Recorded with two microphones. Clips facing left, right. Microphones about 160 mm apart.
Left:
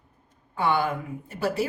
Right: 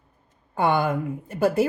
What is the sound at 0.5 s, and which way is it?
Speech, 50° right (ahead or behind).